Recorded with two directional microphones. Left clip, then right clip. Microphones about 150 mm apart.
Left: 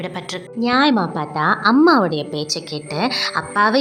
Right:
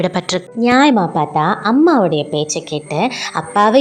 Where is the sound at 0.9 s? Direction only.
25° right (ahead or behind).